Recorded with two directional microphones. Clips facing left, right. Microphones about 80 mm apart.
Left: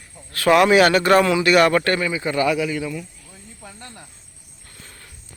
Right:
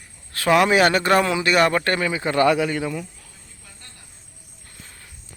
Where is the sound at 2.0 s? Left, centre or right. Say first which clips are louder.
Right 2 dB; right.